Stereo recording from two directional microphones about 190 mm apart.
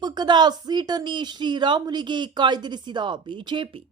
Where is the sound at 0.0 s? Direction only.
20° right (ahead or behind).